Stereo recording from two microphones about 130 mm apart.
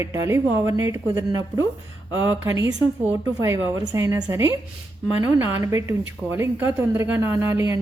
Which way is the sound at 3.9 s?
20° right (ahead or behind).